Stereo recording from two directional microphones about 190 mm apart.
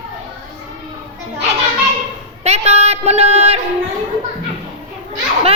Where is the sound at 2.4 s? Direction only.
35° right (ahead or behind).